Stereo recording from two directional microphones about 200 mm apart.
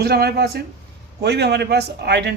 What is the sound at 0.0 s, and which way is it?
A man's voice, 50° right (ahead or behind).